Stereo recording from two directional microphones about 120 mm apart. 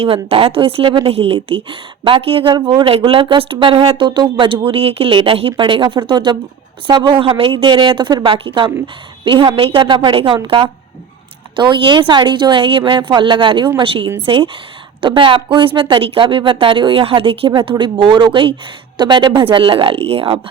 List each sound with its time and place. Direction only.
0.0 s speech: 55° right (ahead or behind)